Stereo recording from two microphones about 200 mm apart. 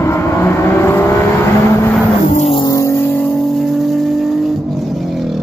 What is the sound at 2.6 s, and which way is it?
Vehicle, 15° left (ahead or behind).